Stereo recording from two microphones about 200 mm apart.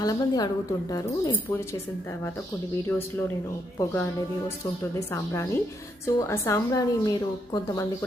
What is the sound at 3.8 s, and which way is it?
Speech, 10° left (ahead or behind).